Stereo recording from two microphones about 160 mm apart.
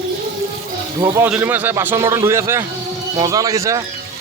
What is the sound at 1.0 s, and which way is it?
A man's voice, 15° right (ahead or behind).